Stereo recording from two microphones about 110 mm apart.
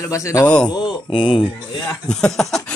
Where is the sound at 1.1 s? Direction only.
50° left (ahead or behind).